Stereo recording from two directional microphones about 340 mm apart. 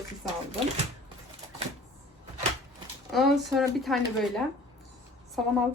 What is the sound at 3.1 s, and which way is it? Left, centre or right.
Speech, centre.